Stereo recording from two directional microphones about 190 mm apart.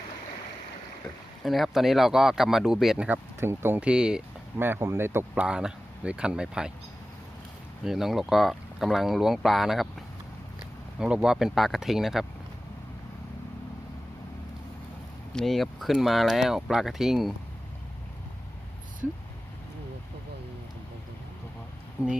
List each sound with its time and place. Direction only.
1.5 s speech: centre (ahead or behind)
7.9 s speech: centre (ahead or behind)
11.0 s speech: 5° right (ahead or behind)
15.3 s speech: centre (ahead or behind)
22.0 s speech: 5° right (ahead or behind)